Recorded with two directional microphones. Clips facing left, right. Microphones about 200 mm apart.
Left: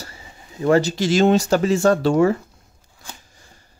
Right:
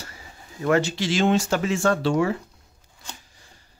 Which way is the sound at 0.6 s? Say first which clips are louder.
Left 4 dB; 35° left (ahead or behind).